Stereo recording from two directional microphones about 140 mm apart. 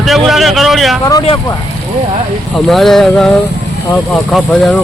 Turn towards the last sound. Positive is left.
turn(degrees=5)  # may be behind; listen again after turning